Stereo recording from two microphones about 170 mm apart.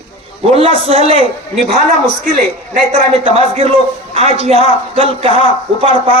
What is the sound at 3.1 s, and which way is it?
A man's voice, 35° right (ahead or behind).